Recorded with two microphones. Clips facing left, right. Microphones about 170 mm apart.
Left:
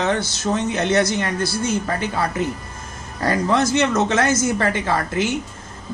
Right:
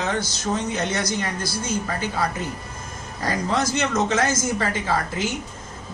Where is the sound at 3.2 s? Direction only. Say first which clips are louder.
Left 5 dB; 60° left (ahead or behind).